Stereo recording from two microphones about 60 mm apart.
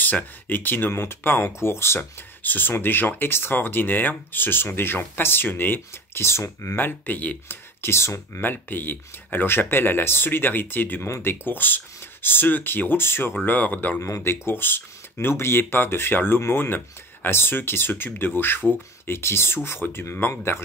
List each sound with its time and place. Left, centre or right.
0.0 s speech: left
2.4 s speech: left
6.7 s speech: left
7.8 s speech: left
8.4 s speech: left
13.5 s speech: left
14.0 s speech: left